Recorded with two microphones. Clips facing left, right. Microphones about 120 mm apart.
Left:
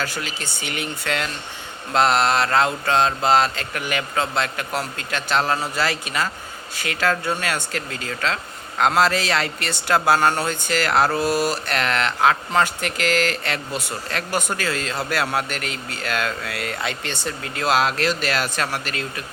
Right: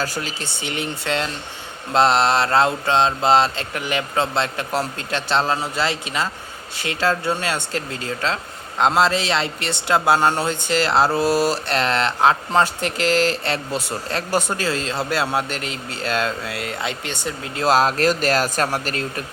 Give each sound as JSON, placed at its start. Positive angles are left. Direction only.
{"t": 0.0, "sound": "a man's voice", "side_deg": -35}
{"t": 17.6, "sound": "speech", "side_deg": -40}